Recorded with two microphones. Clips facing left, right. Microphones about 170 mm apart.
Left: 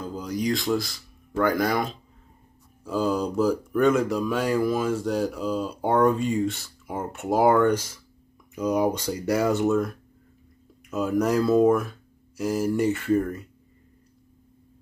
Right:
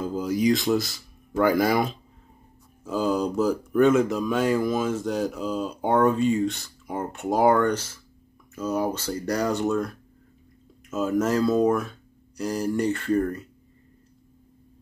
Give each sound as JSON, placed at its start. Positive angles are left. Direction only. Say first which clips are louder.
{"t": 0.0, "sound": "speech", "louder": "right 5 dB", "side_deg": -5}
{"t": 4.0, "sound": "speech", "louder": "right 1 dB", "side_deg": 10}